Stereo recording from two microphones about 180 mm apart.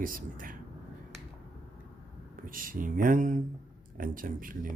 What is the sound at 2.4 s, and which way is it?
Speech, 50° right (ahead or behind).